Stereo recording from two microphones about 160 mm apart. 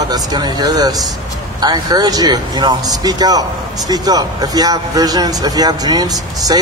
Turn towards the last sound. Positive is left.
turn(degrees=-25)  # may be behind; listen again after turning